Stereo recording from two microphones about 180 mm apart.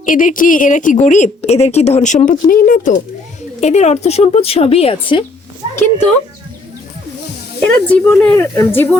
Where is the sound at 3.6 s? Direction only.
40° left (ahead or behind).